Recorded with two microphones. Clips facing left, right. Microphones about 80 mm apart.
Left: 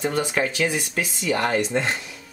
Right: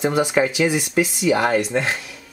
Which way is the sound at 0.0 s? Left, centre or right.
Centre.